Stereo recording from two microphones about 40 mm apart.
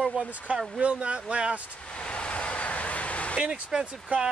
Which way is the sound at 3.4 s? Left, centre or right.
Right.